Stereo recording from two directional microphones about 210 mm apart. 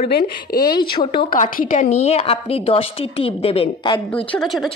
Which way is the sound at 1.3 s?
40° left (ahead or behind).